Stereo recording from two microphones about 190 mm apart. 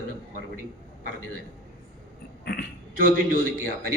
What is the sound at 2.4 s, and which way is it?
Speech, 60° left (ahead or behind).